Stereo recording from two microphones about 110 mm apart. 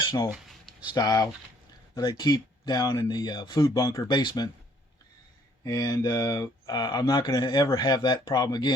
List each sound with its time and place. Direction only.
0.3 s a sound: centre (ahead or behind)
0.9 s speech: 35° left (ahead or behind)
5.6 s speech: 35° left (ahead or behind)